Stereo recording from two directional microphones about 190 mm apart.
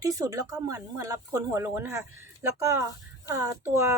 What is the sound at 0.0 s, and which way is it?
A woman's voice, 20° right (ahead or behind).